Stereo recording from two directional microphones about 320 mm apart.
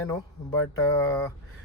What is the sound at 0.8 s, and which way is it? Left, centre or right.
Speech, centre.